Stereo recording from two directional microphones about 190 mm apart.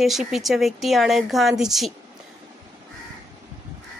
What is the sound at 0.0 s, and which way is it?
A woman's voice, centre (ahead or behind).